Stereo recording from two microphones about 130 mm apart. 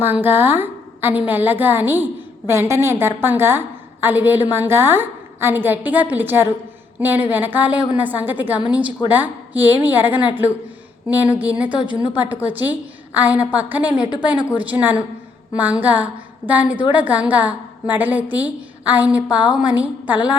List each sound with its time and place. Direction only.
0.0 s a woman's voice: 15° right (ahead or behind)